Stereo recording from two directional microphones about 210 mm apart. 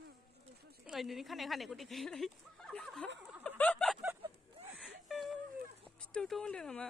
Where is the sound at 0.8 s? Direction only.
Centre (ahead or behind).